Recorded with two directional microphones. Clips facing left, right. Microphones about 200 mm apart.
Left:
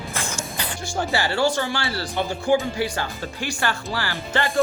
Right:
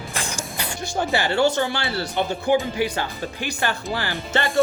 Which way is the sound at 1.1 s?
20° right (ahead or behind).